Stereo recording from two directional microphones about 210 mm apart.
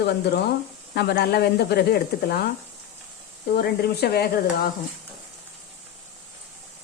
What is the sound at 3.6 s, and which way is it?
Speech, 50° left (ahead or behind).